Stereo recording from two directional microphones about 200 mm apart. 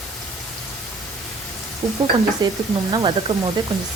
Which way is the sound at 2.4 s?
20° right (ahead or behind).